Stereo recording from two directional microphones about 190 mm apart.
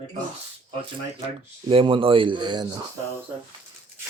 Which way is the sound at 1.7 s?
30° right (ahead or behind).